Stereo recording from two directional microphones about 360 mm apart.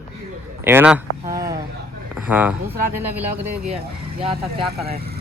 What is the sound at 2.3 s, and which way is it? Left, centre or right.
Speech, centre.